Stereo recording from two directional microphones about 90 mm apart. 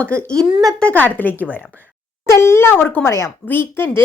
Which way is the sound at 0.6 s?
5° left (ahead or behind).